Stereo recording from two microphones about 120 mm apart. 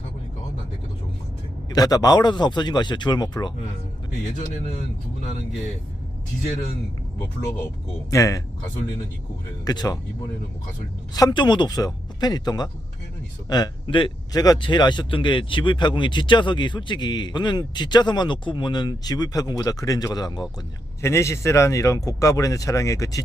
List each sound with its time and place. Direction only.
1.7 s speech: 30° left (ahead or behind)
7.4 s speech: 20° left (ahead or behind)
9.6 s speech: 35° left (ahead or behind)
11.1 s speech: 35° left (ahead or behind)
21.0 s speech: 25° left (ahead or behind)